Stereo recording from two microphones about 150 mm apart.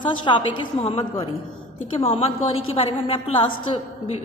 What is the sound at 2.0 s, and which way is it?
A woman's voice, 40° left (ahead or behind).